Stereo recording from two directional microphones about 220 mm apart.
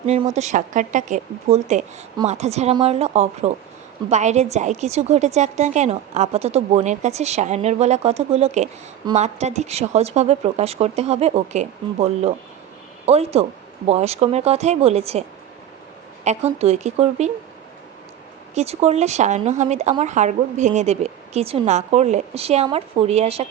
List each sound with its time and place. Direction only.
0.0 s a woman's voice: 30° right (ahead or behind)
16.2 s a woman's voice: 30° right (ahead or behind)
18.5 s speech: 30° right (ahead or behind)